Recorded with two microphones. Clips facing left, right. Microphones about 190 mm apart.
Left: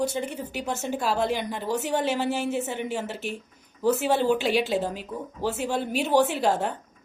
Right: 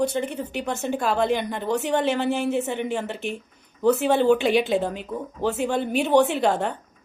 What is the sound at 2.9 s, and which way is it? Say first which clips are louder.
Speech: right 3 dB; 5° left (ahead or behind).